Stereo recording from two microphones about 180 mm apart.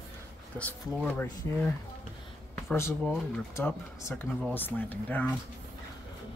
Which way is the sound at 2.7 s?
10° left (ahead or behind).